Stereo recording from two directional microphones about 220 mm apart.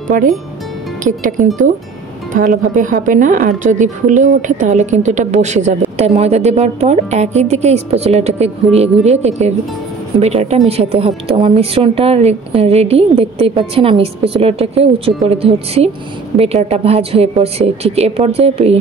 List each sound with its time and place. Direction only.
0.1 s a woman's voice: 40° right (ahead or behind)
2.3 s a woman's voice: 35° right (ahead or behind)